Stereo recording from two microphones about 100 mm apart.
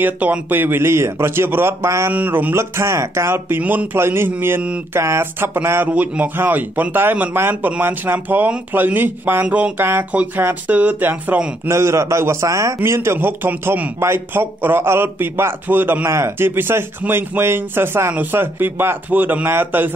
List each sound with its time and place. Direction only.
0.0 s speech: 15° right (ahead or behind)
2.1 s speech: 15° right (ahead or behind)